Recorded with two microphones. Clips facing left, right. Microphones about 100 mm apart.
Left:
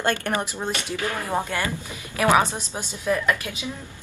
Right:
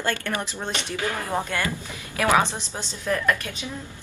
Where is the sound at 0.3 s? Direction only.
15° left (ahead or behind).